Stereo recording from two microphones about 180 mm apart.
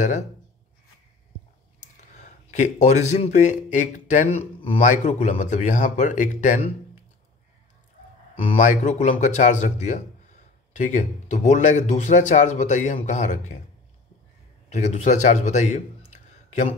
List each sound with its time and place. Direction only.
2.1 s speech: 40° left (ahead or behind)
8.5 s speech: 45° left (ahead or behind)
14.7 s speech: 40° left (ahead or behind)